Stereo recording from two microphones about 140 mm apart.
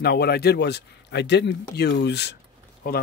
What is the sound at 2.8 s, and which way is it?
Speech, 90° left.